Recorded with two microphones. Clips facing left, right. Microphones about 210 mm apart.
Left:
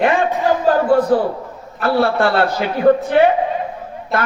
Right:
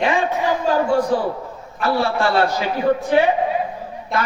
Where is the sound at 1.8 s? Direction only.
55° left (ahead or behind).